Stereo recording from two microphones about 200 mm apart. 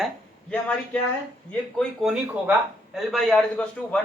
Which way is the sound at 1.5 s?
Centre (ahead or behind).